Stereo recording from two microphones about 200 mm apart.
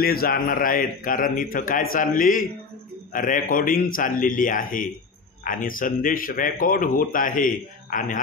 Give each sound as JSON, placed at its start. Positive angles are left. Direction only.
{"t": 0.0, "sound": "speech", "side_deg": 50}